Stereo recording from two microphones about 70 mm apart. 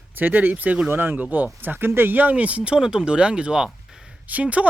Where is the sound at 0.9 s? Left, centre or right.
Right; by 4.0 s centre.